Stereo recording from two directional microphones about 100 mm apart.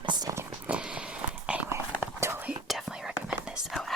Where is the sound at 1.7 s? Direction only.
25° right (ahead or behind).